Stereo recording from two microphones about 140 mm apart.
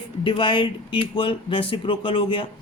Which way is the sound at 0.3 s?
35° left (ahead or behind).